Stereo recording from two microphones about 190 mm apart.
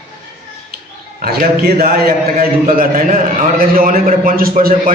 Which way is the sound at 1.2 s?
55° right (ahead or behind).